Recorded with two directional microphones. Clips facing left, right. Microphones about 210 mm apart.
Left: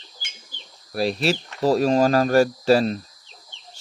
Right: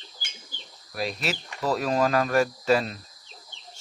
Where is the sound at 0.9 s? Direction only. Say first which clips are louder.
Left 8 dB; 30° left (ahead or behind).